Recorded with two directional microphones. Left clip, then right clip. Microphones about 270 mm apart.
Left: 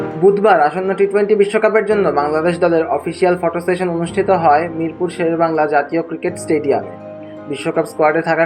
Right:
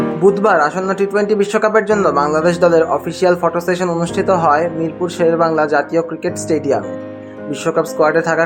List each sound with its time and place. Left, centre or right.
0.3 s speech: centre